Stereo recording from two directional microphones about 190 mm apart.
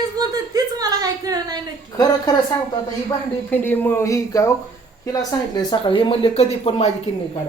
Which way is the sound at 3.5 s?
10° left (ahead or behind).